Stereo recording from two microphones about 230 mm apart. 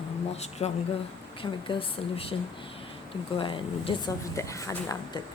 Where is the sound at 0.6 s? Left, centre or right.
Left.